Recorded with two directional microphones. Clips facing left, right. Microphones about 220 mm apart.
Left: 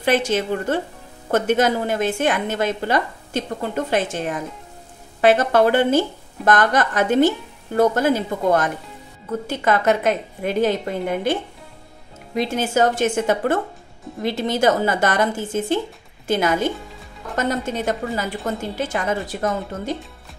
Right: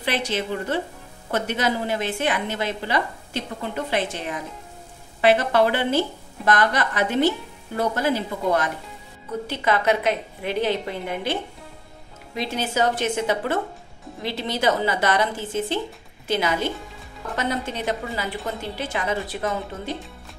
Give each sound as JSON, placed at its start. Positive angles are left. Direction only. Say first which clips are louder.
{"t": 0.0, "sound": "a woman's voice", "louder": "left 6 dB", "side_deg": 45}
{"t": 12.4, "sound": "a woman's voice", "louder": "left 5 dB", "side_deg": 50}